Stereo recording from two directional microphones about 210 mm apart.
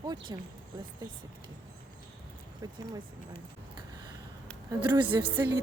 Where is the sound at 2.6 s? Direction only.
15° right (ahead or behind).